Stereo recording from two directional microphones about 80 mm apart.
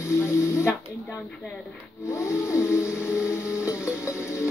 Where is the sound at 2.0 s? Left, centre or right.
Left.